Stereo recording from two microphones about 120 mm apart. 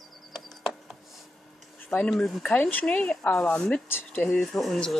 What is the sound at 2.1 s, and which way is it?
Speech, centre (ahead or behind).